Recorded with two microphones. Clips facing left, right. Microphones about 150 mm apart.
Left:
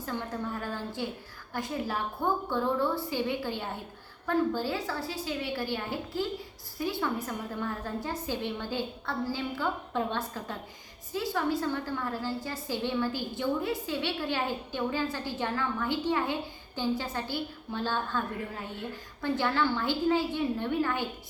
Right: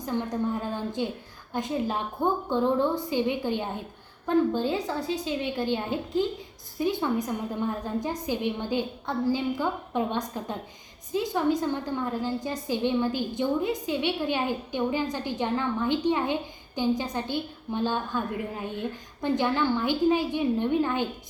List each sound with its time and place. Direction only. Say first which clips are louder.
0.0 s a woman's voice: right 6 dB; 20° right (ahead or behind)